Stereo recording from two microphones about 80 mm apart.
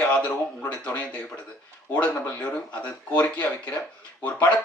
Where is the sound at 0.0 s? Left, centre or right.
Centre.